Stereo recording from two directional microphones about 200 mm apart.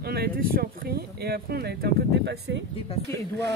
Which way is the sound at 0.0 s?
50° right (ahead or behind).